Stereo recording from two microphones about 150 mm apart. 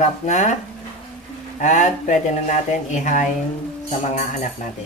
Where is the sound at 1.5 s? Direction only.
55° left (ahead or behind).